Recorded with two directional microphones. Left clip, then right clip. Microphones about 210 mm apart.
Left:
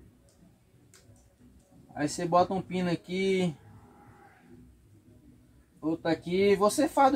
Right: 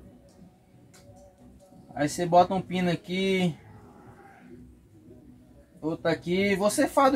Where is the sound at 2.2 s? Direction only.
15° right (ahead or behind).